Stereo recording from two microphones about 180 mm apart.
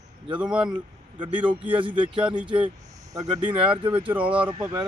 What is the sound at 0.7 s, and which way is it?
Speech, 25° right (ahead or behind).